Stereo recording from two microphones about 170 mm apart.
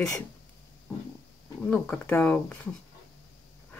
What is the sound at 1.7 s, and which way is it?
Speech, 10° left (ahead or behind).